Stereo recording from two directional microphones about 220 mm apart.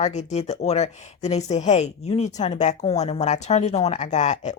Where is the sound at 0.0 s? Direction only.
30° left (ahead or behind).